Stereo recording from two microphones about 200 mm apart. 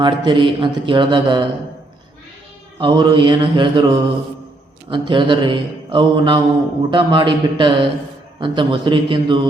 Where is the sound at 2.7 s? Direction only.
25° right (ahead or behind).